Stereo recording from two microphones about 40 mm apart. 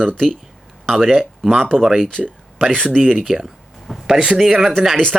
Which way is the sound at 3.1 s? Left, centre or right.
Centre.